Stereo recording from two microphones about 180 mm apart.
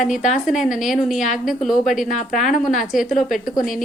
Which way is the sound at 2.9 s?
Centre (ahead or behind).